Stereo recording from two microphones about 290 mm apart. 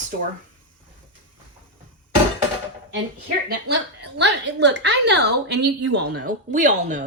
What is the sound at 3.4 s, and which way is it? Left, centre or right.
A woman's voice, right.